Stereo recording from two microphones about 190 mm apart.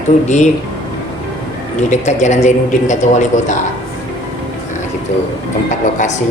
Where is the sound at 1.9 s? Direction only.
40° left (ahead or behind).